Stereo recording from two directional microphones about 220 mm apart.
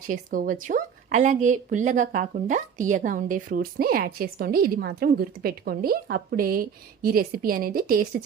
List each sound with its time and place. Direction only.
0.1 s speech: 35° right (ahead or behind)